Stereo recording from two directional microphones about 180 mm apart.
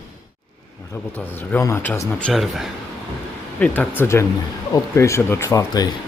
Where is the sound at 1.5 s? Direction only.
10° left (ahead or behind).